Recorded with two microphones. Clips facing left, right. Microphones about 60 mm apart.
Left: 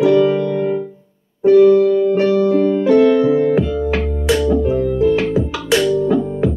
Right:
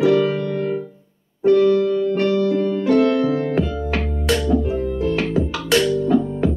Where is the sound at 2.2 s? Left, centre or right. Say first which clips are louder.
Left 5 dB; left.